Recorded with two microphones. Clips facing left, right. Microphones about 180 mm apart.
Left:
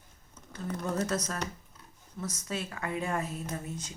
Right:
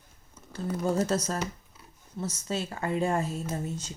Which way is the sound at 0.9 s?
30° right (ahead or behind).